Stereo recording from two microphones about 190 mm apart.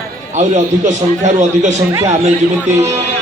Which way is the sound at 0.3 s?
40° right (ahead or behind).